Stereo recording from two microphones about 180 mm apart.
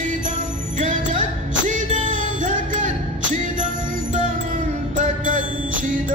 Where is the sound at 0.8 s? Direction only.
45° right (ahead or behind).